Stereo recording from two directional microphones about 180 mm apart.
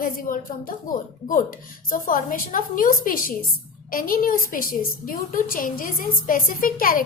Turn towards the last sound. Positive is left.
turn(degrees=50)  # may be behind; listen again after turning